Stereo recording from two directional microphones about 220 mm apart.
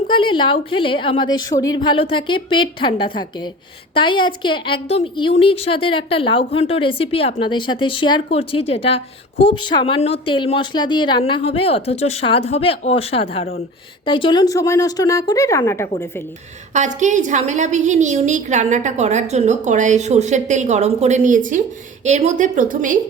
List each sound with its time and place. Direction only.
0.1 s a woman's voice: 20° left (ahead or behind)
16.7 s a woman's voice: 35° right (ahead or behind)